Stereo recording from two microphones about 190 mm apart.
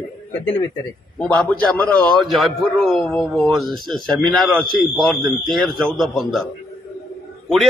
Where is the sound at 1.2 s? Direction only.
5° left (ahead or behind).